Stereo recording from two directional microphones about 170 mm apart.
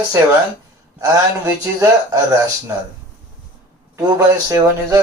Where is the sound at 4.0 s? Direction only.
20° right (ahead or behind).